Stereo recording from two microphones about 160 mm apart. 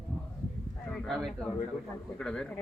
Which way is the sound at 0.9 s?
Centre (ahead or behind).